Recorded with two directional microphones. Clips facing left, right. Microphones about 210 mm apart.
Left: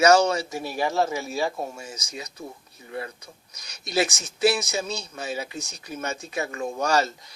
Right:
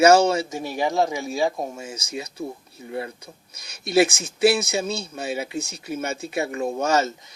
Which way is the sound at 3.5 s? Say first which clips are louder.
Right 7 dB; 25° right (ahead or behind).